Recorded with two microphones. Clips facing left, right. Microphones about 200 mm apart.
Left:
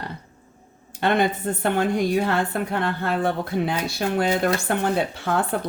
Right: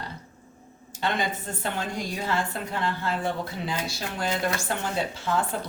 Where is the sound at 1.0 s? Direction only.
60° left (ahead or behind).